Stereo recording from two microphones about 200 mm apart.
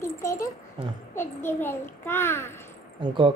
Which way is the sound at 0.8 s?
25° right (ahead or behind).